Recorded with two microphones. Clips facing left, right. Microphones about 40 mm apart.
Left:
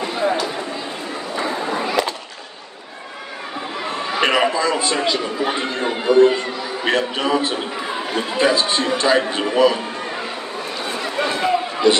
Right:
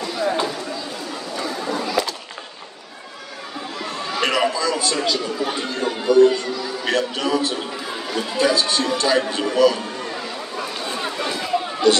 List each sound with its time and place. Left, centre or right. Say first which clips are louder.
0.0 s a sound: left 2 dB; left
3.8 s speech: left 3 dB; left
10.9 s run: left 5 dB; left
11.9 s speech: left 1 dB; centre